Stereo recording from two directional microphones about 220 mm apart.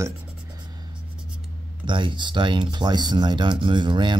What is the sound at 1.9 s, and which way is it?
Speech, 20° right (ahead or behind).